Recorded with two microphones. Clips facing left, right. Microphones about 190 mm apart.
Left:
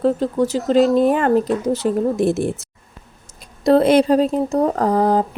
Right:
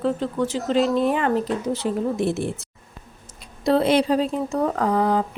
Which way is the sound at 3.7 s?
45° left (ahead or behind).